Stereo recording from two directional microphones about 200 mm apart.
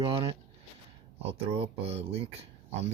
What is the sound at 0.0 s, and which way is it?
Speech, 25° right (ahead or behind).